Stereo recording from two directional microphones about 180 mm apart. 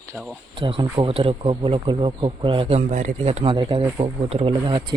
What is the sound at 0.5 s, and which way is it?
Speech, 25° right (ahead or behind).